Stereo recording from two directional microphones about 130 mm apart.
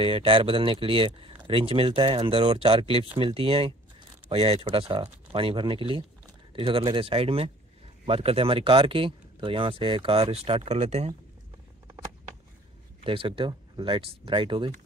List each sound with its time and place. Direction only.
0.0 s speech: 45° right (ahead or behind)
13.0 s speech: 40° right (ahead or behind)